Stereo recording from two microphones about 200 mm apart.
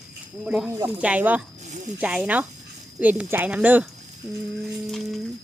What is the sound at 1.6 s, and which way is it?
Speech, 35° right (ahead or behind).